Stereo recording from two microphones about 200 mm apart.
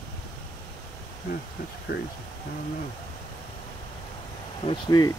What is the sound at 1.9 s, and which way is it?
Speech, 50° left (ahead or behind).